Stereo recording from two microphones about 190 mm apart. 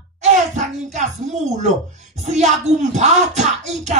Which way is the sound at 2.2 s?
35° right (ahead or behind).